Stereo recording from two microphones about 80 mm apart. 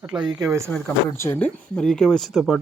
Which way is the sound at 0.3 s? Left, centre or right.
Right.